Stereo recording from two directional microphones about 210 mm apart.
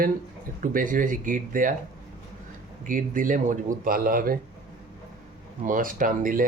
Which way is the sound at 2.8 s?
40° right (ahead or behind).